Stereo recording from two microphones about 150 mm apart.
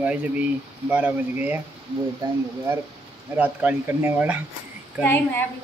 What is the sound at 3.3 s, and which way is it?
Speech, 10° right (ahead or behind).